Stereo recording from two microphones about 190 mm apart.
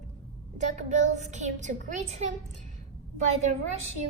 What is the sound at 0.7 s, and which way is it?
A woman's voice, 40° right (ahead or behind).